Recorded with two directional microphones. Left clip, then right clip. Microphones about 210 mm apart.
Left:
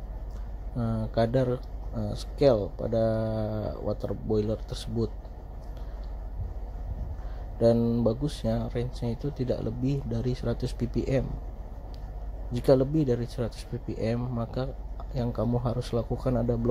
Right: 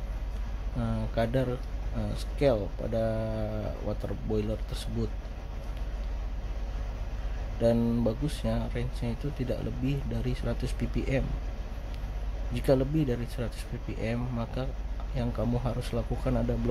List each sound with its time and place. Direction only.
0.7 s speech: 20° left (ahead or behind)
7.6 s speech: 10° left (ahead or behind)
12.5 s speech: 20° left (ahead or behind)